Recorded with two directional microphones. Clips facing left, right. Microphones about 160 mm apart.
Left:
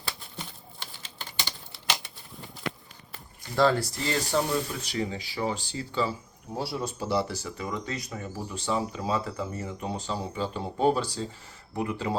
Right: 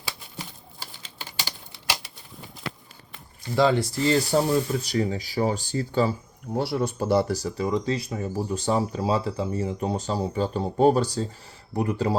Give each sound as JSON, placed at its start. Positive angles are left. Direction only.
{"t": 0.3, "sound": "typewriter", "side_deg": -5}
{"t": 3.5, "sound": "speech", "side_deg": -15}
{"t": 3.9, "sound": "speech", "side_deg": -30}
{"t": 6.6, "sound": "speech", "side_deg": -65}